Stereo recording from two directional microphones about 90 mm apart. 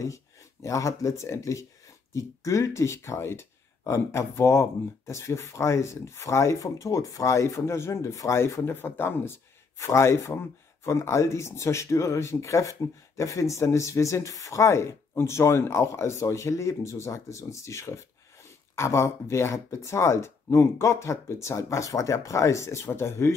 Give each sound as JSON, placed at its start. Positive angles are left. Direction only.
{"t": 0.0, "sound": "speech", "side_deg": 35}